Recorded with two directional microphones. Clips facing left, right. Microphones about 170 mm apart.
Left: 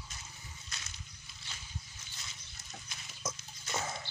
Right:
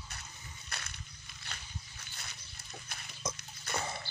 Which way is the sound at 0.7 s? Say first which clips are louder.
Right 7 dB; 60° right (ahead or behind).